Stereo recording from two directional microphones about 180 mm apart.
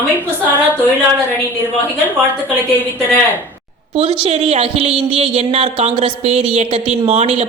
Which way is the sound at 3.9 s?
30° right (ahead or behind).